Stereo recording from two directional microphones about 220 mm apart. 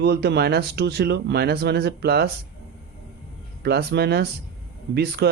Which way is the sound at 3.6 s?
50° right (ahead or behind).